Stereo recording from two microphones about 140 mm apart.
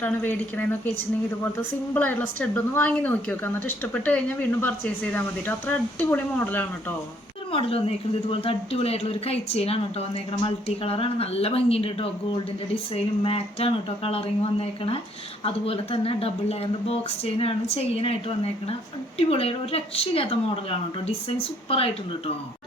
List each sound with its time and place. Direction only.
0.0 s speech: 10° left (ahead or behind)
7.5 s a woman's voice: 45° left (ahead or behind)